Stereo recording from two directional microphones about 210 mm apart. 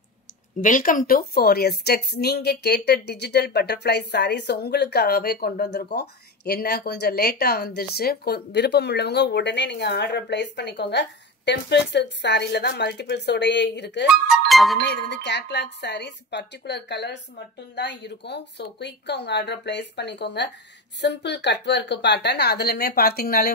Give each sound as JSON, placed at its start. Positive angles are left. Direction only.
{"t": 0.6, "sound": "a woman's voice", "side_deg": 40}
{"t": 14.0, "sound": "speech", "side_deg": 0}
{"t": 14.8, "sound": "a woman's voice", "side_deg": 55}